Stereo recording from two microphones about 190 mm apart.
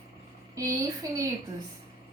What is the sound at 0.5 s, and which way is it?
Speech, 15° right (ahead or behind).